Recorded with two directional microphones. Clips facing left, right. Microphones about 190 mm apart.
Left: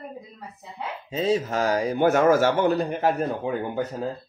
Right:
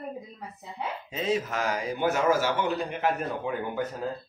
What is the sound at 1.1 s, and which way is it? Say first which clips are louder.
Speech: left 5 dB; 35° left (ahead or behind).